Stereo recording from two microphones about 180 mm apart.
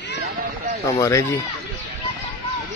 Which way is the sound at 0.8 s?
15° left (ahead or behind).